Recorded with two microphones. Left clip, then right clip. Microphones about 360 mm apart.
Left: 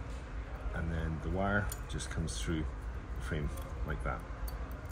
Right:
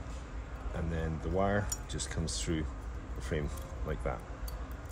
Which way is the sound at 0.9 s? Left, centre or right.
Right.